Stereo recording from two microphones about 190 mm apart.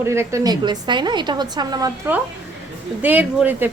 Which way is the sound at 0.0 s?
15° right (ahead or behind).